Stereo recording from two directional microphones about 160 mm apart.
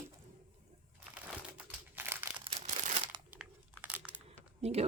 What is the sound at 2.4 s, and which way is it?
Crumpling, 45° right (ahead or behind).